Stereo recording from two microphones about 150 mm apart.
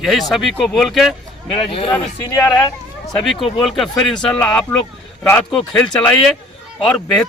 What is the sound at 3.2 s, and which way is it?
Speech, centre (ahead or behind).